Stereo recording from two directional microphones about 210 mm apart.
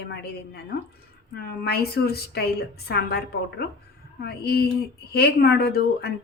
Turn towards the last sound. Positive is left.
turn(degrees=50)  # may be behind; listen again after turning